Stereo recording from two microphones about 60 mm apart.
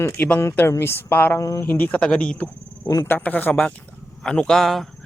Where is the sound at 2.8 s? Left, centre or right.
Left.